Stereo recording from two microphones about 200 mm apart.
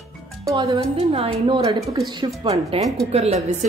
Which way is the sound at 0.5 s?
15° right (ahead or behind).